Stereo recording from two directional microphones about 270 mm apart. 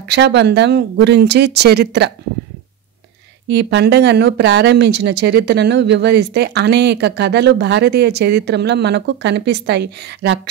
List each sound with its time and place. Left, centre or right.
0.1 s speech: right
3.4 s speech: right